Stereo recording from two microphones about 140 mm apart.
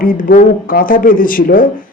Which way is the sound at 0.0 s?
80° left.